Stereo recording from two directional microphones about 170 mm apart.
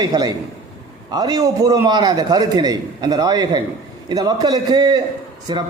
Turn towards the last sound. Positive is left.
turn(degrees=-25)  # may be behind; listen again after turning